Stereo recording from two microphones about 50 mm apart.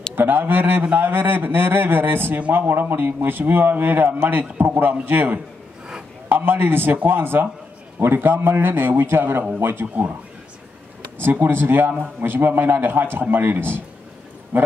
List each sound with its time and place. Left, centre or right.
0.1 s a man's voice: right
11.1 s a man's voice: right